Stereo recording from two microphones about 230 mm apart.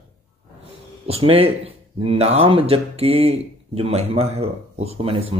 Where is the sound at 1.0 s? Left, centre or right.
Right.